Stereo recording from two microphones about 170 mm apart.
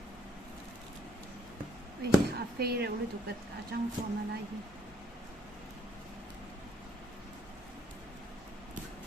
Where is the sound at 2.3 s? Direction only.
70° right (ahead or behind).